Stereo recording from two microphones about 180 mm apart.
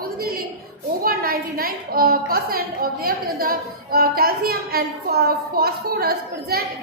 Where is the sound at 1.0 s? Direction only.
55° right (ahead or behind).